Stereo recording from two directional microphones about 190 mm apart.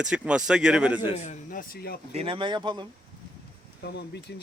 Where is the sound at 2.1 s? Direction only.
30° right (ahead or behind).